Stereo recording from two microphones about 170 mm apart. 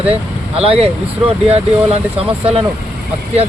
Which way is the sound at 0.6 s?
35° right (ahead or behind).